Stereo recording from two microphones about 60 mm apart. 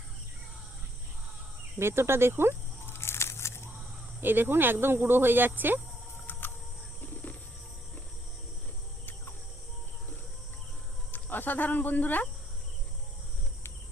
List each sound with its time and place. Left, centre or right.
1.8 s speech: right
2.8 s a sound: left
4.2 s speech: right
7.0 s wild animals: left
11.1 s speech: left